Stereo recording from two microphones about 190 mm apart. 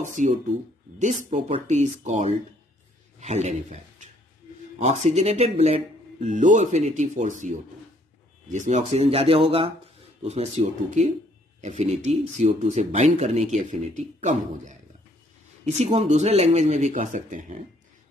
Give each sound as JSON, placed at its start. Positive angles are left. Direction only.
{"t": 0.0, "sound": "a man's voice", "side_deg": -40}
{"t": 4.7, "sound": "speech", "side_deg": -35}